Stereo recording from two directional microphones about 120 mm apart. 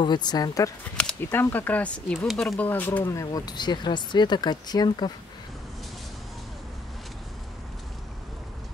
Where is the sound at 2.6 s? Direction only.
15° left (ahead or behind).